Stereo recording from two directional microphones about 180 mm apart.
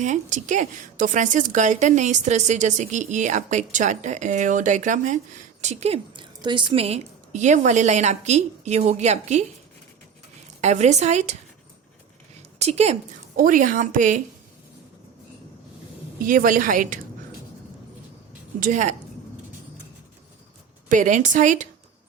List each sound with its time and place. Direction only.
0.0 s a woman's voice: 45° right (ahead or behind)
10.6 s a woman's voice: 40° right (ahead or behind)
12.5 s a woman's voice: 35° right (ahead or behind)
13.3 s a woman's voice: 45° right (ahead or behind)
16.2 s a woman's voice: 50° right (ahead or behind)
18.6 s a woman's voice: 45° right (ahead or behind)
20.9 s a woman's voice: 45° right (ahead or behind)